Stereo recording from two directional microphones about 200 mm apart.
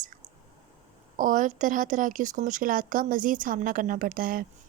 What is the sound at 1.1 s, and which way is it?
Speech, 40° right (ahead or behind).